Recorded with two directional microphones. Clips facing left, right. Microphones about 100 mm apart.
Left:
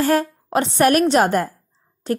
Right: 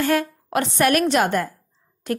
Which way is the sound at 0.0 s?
35° left (ahead or behind).